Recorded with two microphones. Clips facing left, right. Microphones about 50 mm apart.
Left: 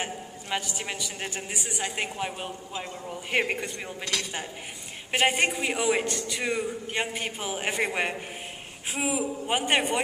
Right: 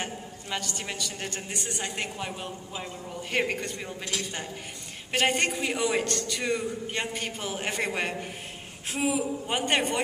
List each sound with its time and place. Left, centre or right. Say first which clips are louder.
0.0 s a man's voice: left 1 dB; centre
4.0 s a woman's voice: left 3 dB; left
5.1 s a man's voice: left 1 dB; centre